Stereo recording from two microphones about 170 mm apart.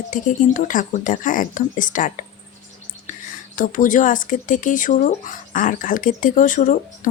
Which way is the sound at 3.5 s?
50° left (ahead or behind).